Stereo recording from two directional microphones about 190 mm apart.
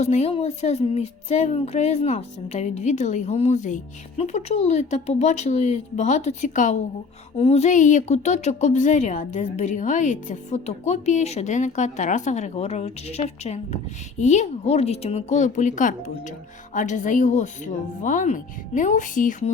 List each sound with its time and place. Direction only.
0.0 s a woman's voice: 35° left (ahead or behind)